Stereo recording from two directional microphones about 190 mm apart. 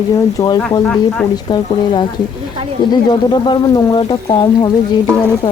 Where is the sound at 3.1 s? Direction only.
25° left (ahead or behind).